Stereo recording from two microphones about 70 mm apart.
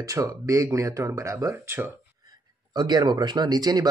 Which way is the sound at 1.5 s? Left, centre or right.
Right.